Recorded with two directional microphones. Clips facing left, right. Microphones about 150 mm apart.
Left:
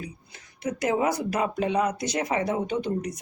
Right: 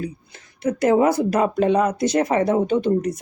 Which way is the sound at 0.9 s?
45° right (ahead or behind).